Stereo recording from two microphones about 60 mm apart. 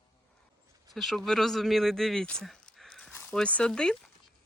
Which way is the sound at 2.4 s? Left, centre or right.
Centre.